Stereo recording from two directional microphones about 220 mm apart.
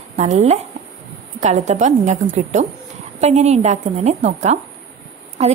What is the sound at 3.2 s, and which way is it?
A woman's voice, 30° right (ahead or behind).